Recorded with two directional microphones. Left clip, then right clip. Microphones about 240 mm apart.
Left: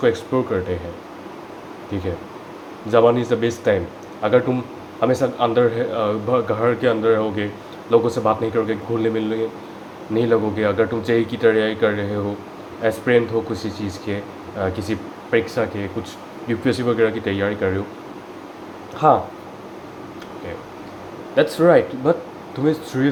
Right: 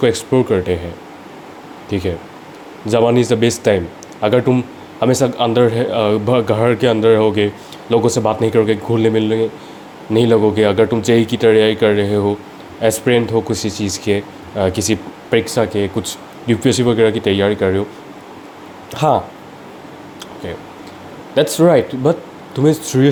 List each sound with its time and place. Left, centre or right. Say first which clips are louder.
0.0 s speech: right 4 dB; right
1.9 s speech: right 6 dB; right
19.0 s speech: right 1 dB; right
21.3 s speech: right 3 dB; right